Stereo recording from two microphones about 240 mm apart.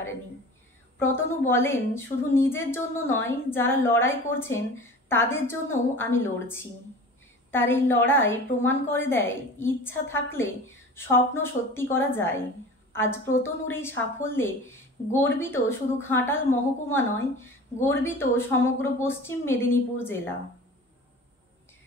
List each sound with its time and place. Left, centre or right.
0.9 s a woman's voice: centre